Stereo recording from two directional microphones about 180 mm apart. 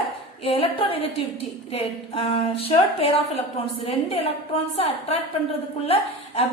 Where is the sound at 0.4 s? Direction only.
30° left (ahead or behind).